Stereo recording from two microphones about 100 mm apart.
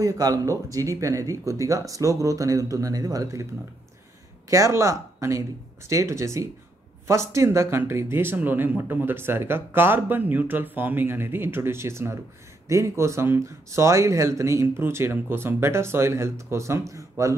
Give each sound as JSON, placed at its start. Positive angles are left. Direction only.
{"t": 0.0, "sound": "speech", "side_deg": -35}
{"t": 4.5, "sound": "speech", "side_deg": -30}